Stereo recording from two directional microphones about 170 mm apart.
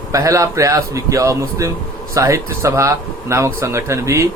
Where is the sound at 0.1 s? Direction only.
20° right (ahead or behind).